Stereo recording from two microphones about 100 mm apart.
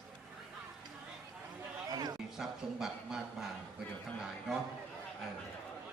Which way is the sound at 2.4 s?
5° right (ahead or behind).